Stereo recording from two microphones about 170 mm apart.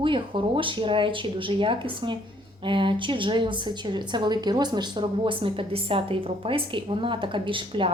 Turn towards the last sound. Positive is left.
turn(degrees=-30)  # may be behind; listen again after turning